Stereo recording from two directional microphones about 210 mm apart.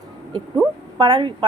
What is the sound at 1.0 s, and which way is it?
Speech, 20° right (ahead or behind).